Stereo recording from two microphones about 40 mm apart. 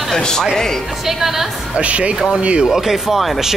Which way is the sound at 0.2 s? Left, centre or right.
Centre.